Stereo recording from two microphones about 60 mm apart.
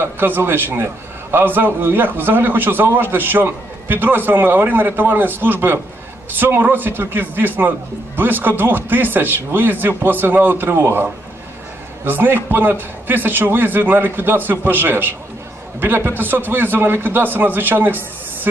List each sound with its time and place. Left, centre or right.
0.0 s a man's voice: right